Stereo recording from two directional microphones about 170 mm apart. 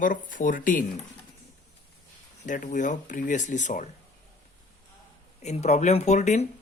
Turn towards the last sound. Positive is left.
turn(degrees=40)  # may be behind; listen again after turning